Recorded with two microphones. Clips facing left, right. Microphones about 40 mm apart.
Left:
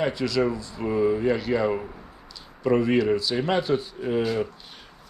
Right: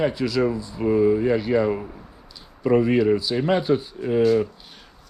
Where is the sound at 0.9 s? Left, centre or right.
Centre.